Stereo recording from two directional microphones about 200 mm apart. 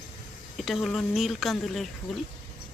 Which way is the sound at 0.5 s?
Centre (ahead or behind).